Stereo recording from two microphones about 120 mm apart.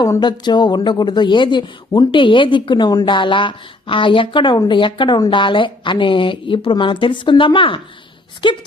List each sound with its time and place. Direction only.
0.0 s a woman's voice: 35° left (ahead or behind)